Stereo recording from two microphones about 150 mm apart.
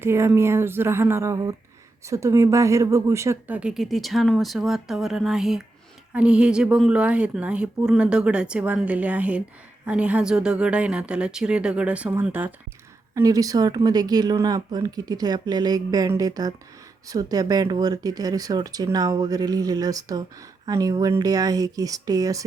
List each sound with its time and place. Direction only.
0.0 s speech: 15° right (ahead or behind)
13.1 s speech: 25° right (ahead or behind)